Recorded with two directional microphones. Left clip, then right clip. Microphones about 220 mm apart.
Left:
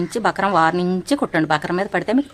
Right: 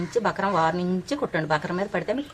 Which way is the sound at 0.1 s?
45° left (ahead or behind).